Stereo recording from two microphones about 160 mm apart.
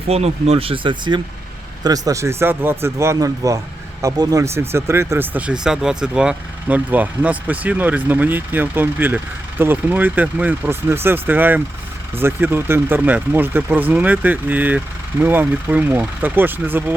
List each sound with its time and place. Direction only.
0.1 s speech: 40° right (ahead or behind); by 16.9 s 10° right (ahead or behind)